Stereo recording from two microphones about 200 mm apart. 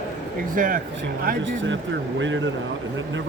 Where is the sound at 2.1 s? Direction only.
70° right (ahead or behind).